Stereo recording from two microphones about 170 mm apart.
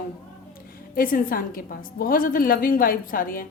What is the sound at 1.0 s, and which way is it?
A woman's voice, 55° left (ahead or behind).